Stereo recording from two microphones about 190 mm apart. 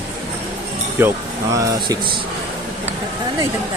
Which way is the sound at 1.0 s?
10° right (ahead or behind).